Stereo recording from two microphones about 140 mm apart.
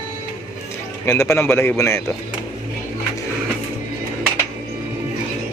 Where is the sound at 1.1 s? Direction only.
20° left (ahead or behind).